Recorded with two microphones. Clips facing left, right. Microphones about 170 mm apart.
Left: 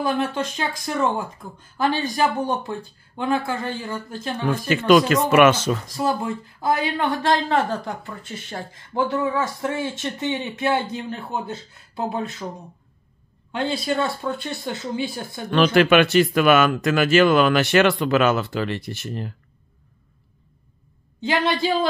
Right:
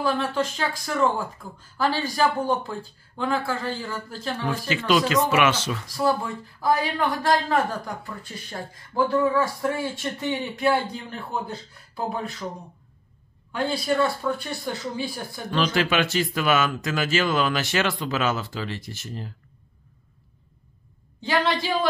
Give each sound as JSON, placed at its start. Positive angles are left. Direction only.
{"t": 0.0, "sound": "speech", "side_deg": 20}
{"t": 4.5, "sound": "speech", "side_deg": 50}
{"t": 5.9, "sound": "speech", "side_deg": 20}
{"t": 13.5, "sound": "speech", "side_deg": 25}
{"t": 15.5, "sound": "a man's voice", "side_deg": 60}
{"t": 21.2, "sound": "speech", "side_deg": 25}